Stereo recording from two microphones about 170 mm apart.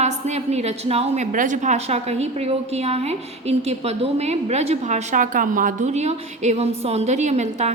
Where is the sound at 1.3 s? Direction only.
50° right (ahead or behind).